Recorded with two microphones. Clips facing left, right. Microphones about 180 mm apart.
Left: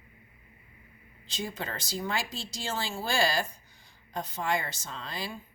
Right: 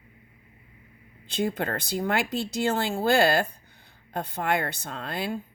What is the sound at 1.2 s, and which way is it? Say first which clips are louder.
Speech: right 9 dB; 60° right (ahead or behind).